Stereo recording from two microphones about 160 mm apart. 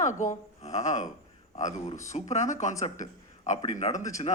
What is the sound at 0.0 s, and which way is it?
A man's voice, 50° left (ahead or behind).